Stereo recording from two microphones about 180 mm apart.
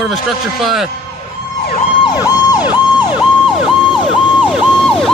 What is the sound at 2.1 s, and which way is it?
Emergency vehicle, 20° left (ahead or behind).